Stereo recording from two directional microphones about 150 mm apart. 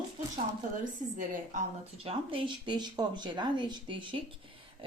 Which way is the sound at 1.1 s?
60° right (ahead or behind).